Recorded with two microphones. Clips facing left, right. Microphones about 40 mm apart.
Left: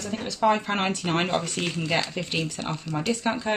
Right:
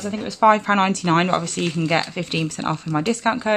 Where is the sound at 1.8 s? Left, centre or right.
Right.